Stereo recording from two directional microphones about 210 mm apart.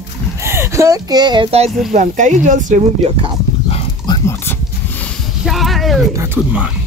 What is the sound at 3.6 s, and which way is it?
Dog, 25° left (ahead or behind).